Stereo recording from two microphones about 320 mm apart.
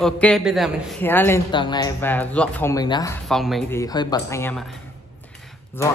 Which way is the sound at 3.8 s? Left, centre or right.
Centre.